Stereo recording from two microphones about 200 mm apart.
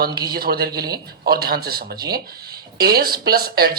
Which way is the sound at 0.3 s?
50° right (ahead or behind).